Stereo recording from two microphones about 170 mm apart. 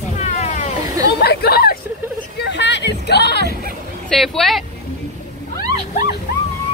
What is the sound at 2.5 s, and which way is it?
Music, 90° left.